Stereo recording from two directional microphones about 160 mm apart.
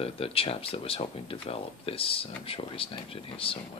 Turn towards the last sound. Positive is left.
turn(degrees=35)  # may be behind; listen again after turning